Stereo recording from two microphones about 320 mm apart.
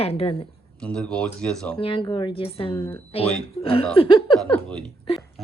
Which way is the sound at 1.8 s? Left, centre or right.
Centre.